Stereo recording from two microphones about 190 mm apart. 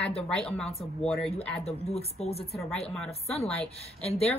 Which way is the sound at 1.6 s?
35° left (ahead or behind).